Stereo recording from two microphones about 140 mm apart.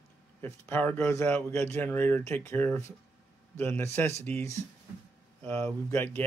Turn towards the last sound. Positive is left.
turn(degrees=15)  # may be behind; listen again after turning